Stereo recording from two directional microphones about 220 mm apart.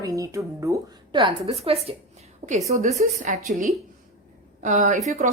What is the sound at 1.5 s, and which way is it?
A woman's voice, 25° right (ahead or behind).